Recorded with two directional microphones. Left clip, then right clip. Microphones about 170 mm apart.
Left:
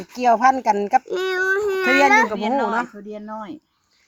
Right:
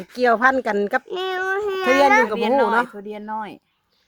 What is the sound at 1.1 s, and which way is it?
Child singing, 10° left (ahead or behind).